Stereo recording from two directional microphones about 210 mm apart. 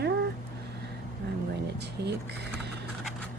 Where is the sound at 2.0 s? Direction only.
50° right (ahead or behind).